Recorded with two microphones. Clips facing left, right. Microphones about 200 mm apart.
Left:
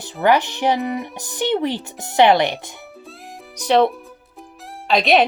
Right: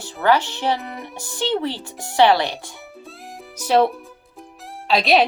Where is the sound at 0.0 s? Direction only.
15° left (ahead or behind).